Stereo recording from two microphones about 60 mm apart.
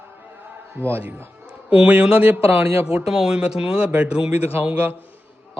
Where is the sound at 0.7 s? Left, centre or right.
Right.